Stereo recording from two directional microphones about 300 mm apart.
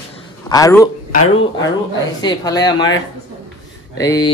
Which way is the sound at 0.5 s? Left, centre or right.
Centre.